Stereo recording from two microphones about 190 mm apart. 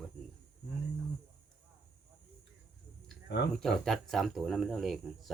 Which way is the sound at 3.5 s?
Centre (ahead or behind).